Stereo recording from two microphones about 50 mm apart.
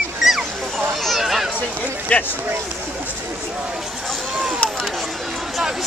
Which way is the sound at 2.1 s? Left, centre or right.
Left.